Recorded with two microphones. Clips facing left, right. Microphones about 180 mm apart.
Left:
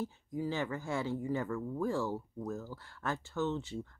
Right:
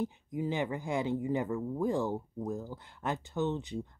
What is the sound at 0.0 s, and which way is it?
Speech, 20° right (ahead or behind).